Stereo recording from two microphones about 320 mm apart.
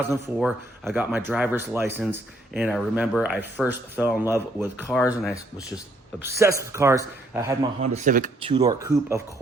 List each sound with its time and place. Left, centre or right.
0.1 s speech: centre
6.1 s speech: centre
7.8 s speech: right